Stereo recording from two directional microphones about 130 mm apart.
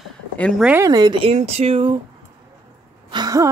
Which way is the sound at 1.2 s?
55° right (ahead or behind).